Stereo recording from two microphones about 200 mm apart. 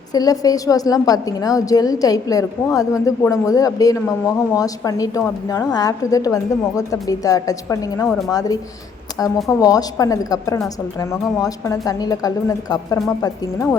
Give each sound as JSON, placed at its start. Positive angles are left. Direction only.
{"t": 0.1, "sound": "a woman's voice", "side_deg": 20}